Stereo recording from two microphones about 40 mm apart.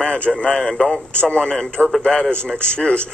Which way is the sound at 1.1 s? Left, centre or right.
Left.